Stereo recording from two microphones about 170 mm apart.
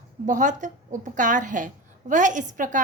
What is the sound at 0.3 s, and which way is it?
A woman's voice, 45° right (ahead or behind).